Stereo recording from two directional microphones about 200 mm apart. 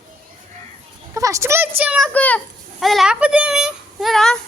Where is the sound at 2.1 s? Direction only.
5° left (ahead or behind).